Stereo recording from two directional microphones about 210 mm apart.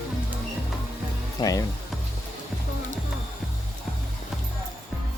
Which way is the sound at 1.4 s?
15° left (ahead or behind).